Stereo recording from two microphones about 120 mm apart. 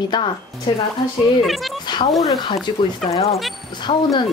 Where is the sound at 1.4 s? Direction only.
Centre (ahead or behind).